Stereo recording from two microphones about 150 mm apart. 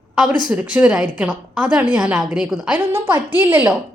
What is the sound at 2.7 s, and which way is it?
A woman's voice, 15° right (ahead or behind).